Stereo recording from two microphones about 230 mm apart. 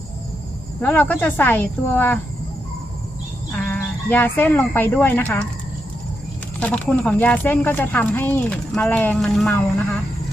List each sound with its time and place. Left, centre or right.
0.8 s speech: centre
3.5 s speech: centre
6.6 s speech: centre